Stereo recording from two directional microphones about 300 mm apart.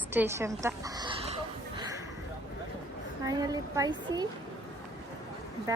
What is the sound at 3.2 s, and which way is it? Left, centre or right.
A woman's voice, centre.